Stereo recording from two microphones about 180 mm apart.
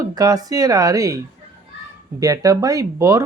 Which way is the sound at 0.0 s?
20° right (ahead or behind).